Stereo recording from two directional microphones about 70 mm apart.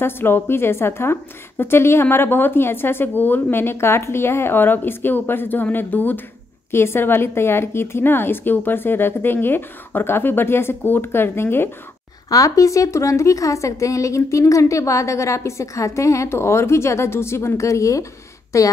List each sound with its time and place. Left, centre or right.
0.0 s a woman's voice: left
6.7 s a woman's voice: left
12.3 s a woman's voice: left